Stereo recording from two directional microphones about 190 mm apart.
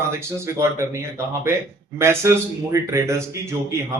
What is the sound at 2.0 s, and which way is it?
Speech, 15° right (ahead or behind).